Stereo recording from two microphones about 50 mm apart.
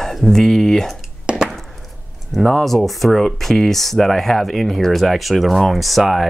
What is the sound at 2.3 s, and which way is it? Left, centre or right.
Speech, centre.